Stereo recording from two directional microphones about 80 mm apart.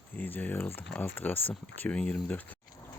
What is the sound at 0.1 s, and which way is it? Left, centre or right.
Speech, left.